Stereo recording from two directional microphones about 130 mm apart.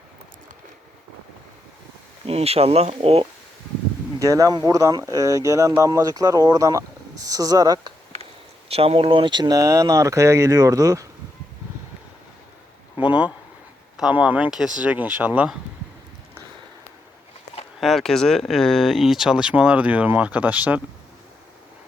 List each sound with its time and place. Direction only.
2.2 s speech: 50° right (ahead or behind)
4.2 s speech: 25° right (ahead or behind)
8.7 s speech: 50° right (ahead or behind); by 11.1 s 25° right (ahead or behind)
13.0 s a sound: 10° right (ahead or behind)
13.9 s speech: 10° right (ahead or behind)
17.7 s speech: centre (ahead or behind)